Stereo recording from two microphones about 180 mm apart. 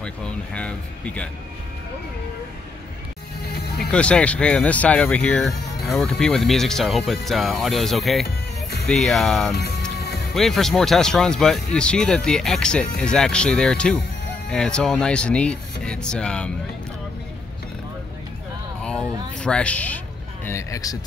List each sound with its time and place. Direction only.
0.0 s speech: 5° left (ahead or behind)
3.4 s music: 60° left (ahead or behind)
3.9 s speech: 5° left (ahead or behind)
9.9 s music: 65° left (ahead or behind)
10.3 s speech: centre (ahead or behind)
18.8 s a sound: 5° left (ahead or behind)
19.4 s speech: 5° left (ahead or behind)